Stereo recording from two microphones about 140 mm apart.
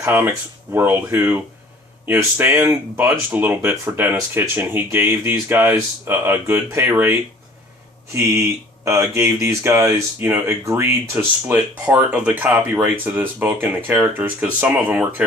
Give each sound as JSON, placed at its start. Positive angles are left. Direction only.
{"t": 0.0, "sound": "speech", "side_deg": -15}
{"t": 8.8, "sound": "speech", "side_deg": -20}